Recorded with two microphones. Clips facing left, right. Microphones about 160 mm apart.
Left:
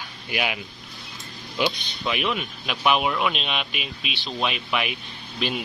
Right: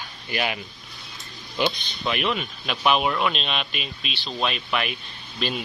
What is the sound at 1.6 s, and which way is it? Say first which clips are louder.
Speech: even; 5° left (ahead or behind).